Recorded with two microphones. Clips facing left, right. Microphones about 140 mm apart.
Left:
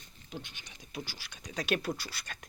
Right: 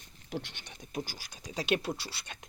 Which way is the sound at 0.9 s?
45° right (ahead or behind).